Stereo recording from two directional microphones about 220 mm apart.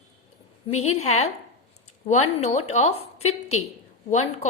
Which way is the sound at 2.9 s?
90° left.